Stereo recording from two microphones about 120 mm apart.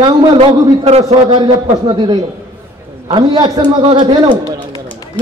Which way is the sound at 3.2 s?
35° right (ahead or behind).